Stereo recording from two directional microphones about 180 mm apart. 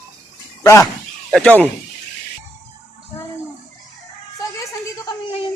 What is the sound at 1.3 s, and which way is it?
Speech, 5° left (ahead or behind).